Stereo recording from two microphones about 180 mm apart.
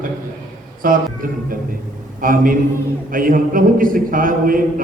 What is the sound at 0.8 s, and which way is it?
Speech, 50° right (ahead or behind).